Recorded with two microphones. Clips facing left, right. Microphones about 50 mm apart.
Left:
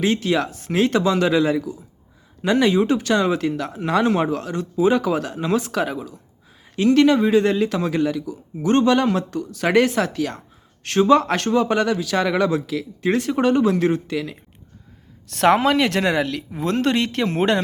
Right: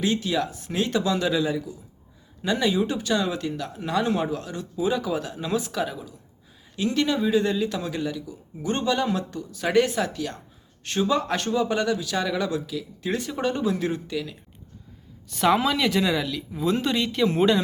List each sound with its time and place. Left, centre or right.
0.0 s speech: left
10.8 s speech: left